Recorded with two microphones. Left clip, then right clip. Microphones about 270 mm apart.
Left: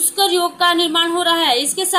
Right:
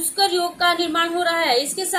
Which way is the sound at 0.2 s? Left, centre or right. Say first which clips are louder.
Left 3 dB; left.